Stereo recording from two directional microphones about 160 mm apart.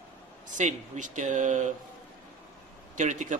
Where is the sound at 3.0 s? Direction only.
50° right (ahead or behind).